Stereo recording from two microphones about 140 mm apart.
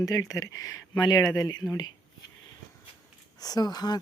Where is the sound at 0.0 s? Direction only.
25° left (ahead or behind).